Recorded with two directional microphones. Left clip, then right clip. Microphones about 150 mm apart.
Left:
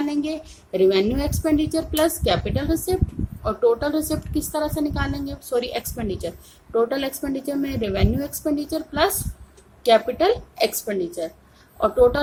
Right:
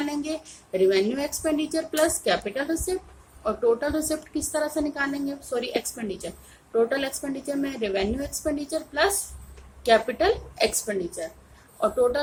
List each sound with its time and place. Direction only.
0.0 s a woman's voice: 35° left (ahead or behind)